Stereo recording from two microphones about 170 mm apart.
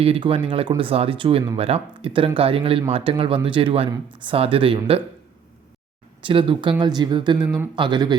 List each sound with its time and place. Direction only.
0.0 s speech: 35° right (ahead or behind)
6.2 s speech: 30° right (ahead or behind)